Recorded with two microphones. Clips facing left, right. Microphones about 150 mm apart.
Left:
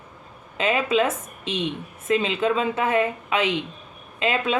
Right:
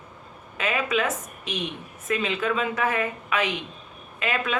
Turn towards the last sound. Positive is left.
turn(degrees=25)  # may be behind; listen again after turning